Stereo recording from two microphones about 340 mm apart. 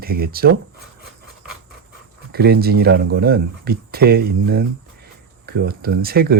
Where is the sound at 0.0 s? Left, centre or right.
Right.